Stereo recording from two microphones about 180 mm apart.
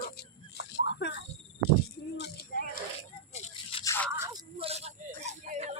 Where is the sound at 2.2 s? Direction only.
65° left (ahead or behind).